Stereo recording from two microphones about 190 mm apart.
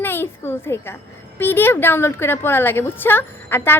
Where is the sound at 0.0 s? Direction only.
10° left (ahead or behind).